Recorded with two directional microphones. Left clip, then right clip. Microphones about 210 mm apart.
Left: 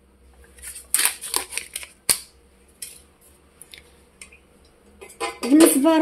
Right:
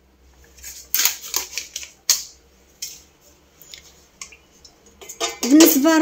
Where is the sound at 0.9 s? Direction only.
35° left (ahead or behind).